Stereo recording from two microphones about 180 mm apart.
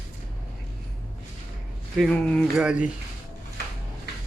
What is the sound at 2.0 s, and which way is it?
Speech, 5° left (ahead or behind).